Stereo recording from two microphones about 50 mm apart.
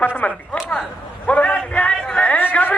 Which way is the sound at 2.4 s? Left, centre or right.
Left.